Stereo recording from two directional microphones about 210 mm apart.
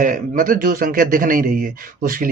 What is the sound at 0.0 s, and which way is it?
A man's voice, 40° right (ahead or behind).